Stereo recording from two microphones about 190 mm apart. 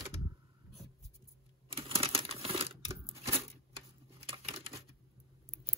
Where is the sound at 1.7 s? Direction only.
30° right (ahead or behind).